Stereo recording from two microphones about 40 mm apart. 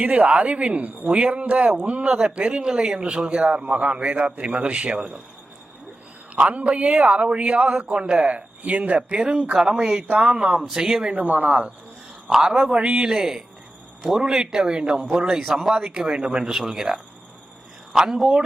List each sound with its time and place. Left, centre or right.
0.0 s speech: right
1.0 s speech: right
2.0 s a man's voice: right
4.9 s a man's voice: centre
6.3 s speech: right
10.1 s speech: right
10.7 s a man's voice: centre
11.1 s speech: right
12.3 s a man's voice: centre
12.7 s speech: right
13.1 s a man's voice: centre
16.5 s a man's voice: centre